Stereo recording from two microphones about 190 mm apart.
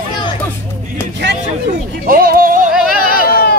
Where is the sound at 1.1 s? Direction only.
60° right (ahead or behind).